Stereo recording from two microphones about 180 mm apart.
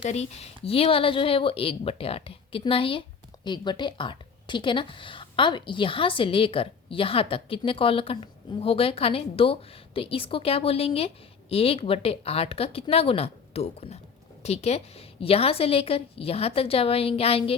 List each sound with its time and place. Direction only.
0.0 s a woman's voice: 35° left (ahead or behind)